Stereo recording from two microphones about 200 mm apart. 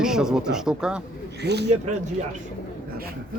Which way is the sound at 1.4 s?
55° right (ahead or behind).